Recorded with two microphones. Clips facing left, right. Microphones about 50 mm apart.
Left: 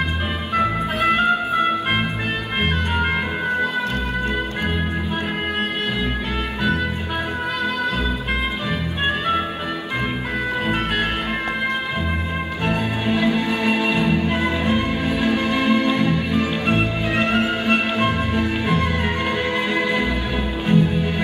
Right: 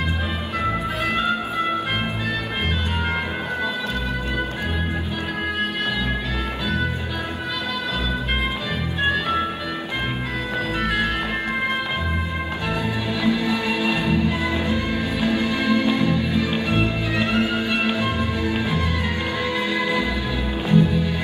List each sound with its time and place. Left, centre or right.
0.6 s music: left
12.6 s music: left